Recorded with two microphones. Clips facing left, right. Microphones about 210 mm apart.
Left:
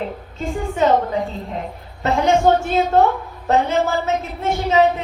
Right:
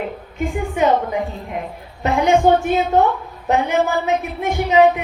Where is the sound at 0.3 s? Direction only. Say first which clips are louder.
Right 1 dB; 15° right (ahead or behind).